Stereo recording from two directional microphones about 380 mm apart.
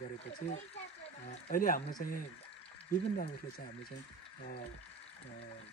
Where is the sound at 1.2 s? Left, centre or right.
Centre.